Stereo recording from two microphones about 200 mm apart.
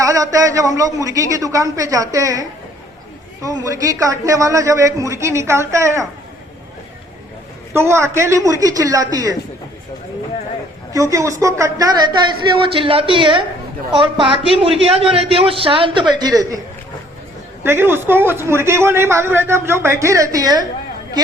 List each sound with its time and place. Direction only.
0.0 s a man's voice: 15° right (ahead or behind)
7.7 s a man's voice: 10° right (ahead or behind)
10.9 s a man's voice: 15° right (ahead or behind)
17.6 s a man's voice: 10° right (ahead or behind)